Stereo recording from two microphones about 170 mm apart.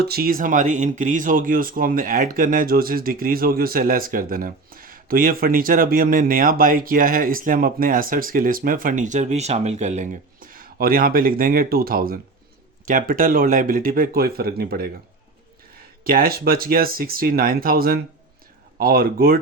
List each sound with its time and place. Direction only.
0.0 s speech: 65° right (ahead or behind)
16.0 s speech: 60° right (ahead or behind)